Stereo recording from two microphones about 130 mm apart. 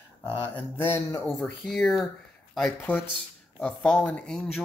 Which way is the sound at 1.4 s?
Centre (ahead or behind).